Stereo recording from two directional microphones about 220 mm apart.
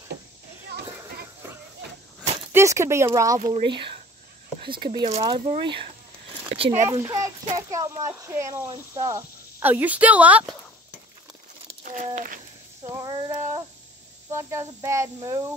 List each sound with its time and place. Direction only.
2.5 s speech: 10° right (ahead or behind); by 6.9 s 30° right (ahead or behind)
6.9 s a child's voice: 15° right (ahead or behind)
11.8 s a sound: 35° right (ahead or behind)
12.8 s child singing: 20° right (ahead or behind)
14.3 s speech: 10° right (ahead or behind)